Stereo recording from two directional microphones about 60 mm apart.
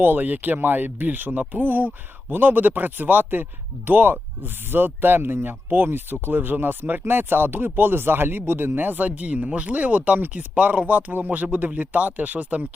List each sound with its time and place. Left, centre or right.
0.0 s speech: right